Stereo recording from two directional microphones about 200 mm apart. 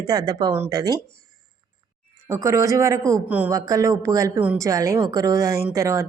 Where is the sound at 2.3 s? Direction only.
15° right (ahead or behind).